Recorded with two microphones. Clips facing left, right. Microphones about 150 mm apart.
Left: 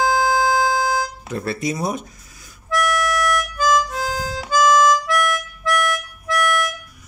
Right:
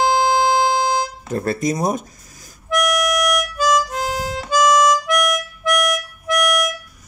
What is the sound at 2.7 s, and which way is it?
Harmonica, 15° right (ahead or behind).